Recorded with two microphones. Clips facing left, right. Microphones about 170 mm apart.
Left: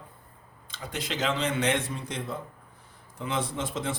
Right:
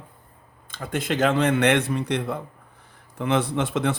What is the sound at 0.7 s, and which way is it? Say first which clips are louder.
Speech: right 8 dB; 55° right (ahead or behind).